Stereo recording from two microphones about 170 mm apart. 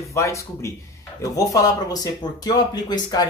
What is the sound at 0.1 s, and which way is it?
Speech, 15° left (ahead or behind).